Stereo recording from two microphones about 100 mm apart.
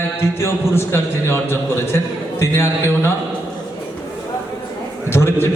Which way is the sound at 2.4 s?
25° left (ahead or behind).